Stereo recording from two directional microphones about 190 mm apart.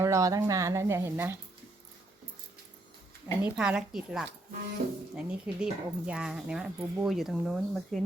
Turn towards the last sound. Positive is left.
turn(degrees=0)  # may be behind; listen again after turning